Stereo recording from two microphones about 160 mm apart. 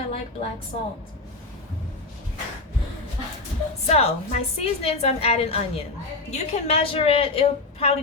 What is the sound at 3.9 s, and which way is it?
A woman's voice, 45° left (ahead or behind).